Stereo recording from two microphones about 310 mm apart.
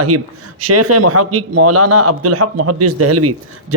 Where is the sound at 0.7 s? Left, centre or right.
Right.